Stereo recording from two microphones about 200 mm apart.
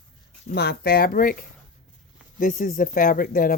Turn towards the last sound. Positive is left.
turn(degrees=45)  # may be behind; listen again after turning